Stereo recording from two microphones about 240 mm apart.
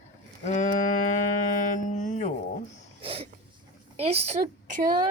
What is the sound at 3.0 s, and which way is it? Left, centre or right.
Speech, right.